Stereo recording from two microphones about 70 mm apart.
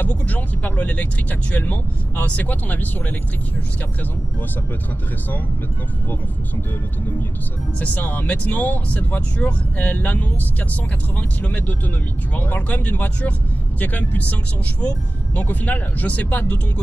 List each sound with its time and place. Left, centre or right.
0.0 s speech: left
7.8 s speech: left